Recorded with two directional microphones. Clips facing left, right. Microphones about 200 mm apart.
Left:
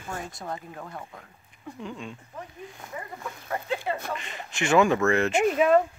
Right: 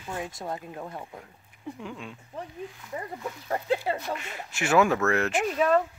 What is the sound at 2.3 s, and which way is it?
Speech, 30° right (ahead or behind).